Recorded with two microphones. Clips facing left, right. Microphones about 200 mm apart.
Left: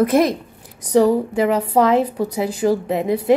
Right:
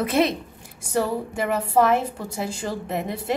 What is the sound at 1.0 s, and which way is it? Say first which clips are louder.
A woman's voice: left 9 dB; 15° left (ahead or behind).